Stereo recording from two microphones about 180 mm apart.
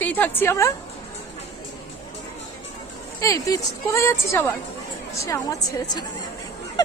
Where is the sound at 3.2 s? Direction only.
20° left (ahead or behind).